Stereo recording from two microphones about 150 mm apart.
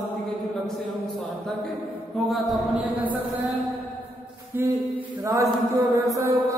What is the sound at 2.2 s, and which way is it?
Speech, centre (ahead or behind).